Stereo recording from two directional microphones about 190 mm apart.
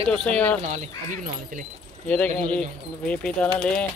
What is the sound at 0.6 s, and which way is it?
Speech, 40° right (ahead or behind).